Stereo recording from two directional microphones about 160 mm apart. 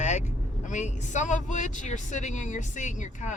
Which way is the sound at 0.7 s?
50° left (ahead or behind).